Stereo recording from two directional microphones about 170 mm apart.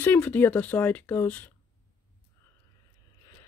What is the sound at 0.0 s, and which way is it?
Speech, 10° left (ahead or behind).